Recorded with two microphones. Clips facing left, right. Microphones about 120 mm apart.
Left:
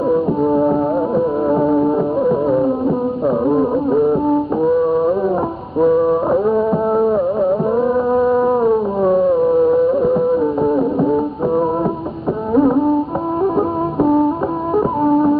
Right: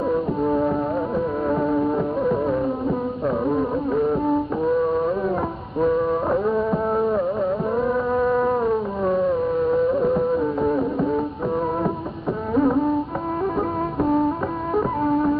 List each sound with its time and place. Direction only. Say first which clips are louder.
0.1 s music: left 8 dB; 25° left (ahead or behind)